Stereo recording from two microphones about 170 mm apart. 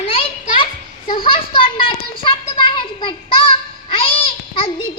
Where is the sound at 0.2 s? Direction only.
30° left (ahead or behind).